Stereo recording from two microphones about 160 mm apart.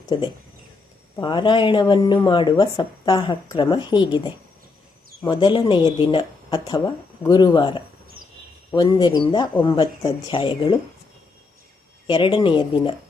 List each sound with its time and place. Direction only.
0.0 s speech: 25° left (ahead or behind)
12.0 s speech: 30° left (ahead or behind)